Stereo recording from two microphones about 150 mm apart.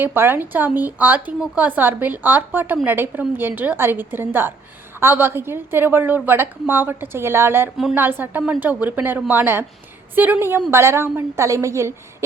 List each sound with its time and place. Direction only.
0.0 s a woman's voice: 15° right (ahead or behind)